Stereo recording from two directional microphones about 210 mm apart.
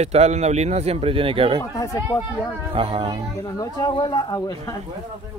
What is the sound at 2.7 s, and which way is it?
Speech, 25° right (ahead or behind).